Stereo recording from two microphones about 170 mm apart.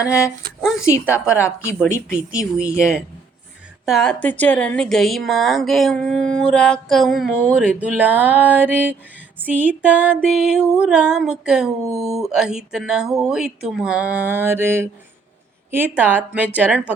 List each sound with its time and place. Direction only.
0.0 s speech: 15° left (ahead or behind)
2.1 s a woman's voice: 5° right (ahead or behind)